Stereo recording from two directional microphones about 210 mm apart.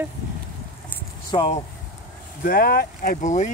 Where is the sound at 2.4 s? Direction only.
45° left (ahead or behind).